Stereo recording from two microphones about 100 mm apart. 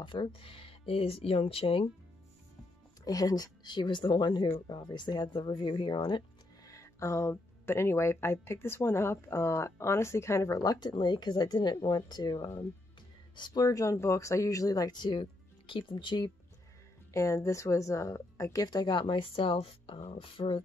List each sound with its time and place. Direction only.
0.0 s speech: 55° left (ahead or behind)
3.1 s a woman's voice: 40° left (ahead or behind)
6.6 s a woman's voice: 30° left (ahead or behind); by 16.3 s 50° left (ahead or behind)
17.1 s a woman's voice: 30° left (ahead or behind); by 20.6 s 65° left (ahead or behind)